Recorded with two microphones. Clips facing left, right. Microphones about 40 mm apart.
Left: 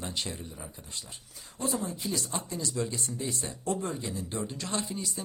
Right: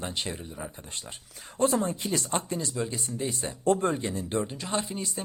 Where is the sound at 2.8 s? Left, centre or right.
Right.